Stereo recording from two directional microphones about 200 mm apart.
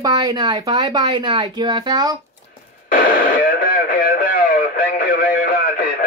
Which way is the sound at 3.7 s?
45° left (ahead or behind).